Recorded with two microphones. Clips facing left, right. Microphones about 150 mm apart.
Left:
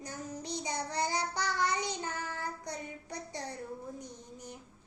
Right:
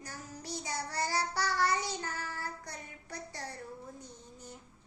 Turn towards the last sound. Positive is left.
turn(degrees=15)  # may be behind; listen again after turning